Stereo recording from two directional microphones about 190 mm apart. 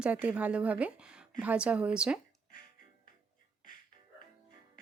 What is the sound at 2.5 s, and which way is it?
Music, 50° left (ahead or behind).